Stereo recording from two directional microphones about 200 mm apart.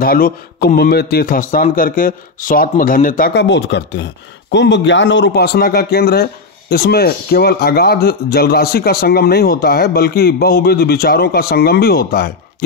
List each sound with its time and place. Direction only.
0.0 s a man's voice: 45° left (ahead or behind)